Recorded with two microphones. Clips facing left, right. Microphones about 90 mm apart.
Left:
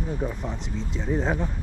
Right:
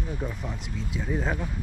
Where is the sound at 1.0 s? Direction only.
25° left (ahead or behind).